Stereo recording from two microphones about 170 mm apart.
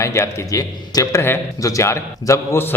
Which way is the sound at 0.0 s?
15° left (ahead or behind).